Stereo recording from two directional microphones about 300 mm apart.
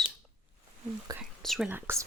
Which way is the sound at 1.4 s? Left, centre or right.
Centre.